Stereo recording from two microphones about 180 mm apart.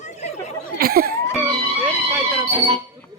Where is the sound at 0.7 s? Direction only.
55° right (ahead or behind).